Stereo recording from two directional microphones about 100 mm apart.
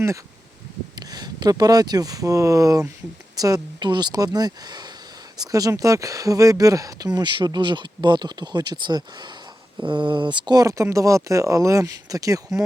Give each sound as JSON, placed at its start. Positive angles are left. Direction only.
{"t": 0.9, "sound": "speech", "side_deg": -45}